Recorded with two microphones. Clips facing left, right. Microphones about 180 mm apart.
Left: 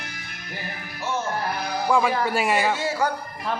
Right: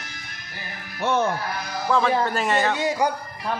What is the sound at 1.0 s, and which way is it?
Speech, 60° right (ahead or behind).